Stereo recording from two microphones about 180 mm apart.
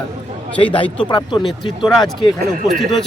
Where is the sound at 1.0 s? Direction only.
25° left (ahead or behind).